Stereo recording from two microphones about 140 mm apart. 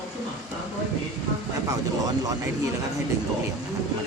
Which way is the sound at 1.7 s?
25° right (ahead or behind).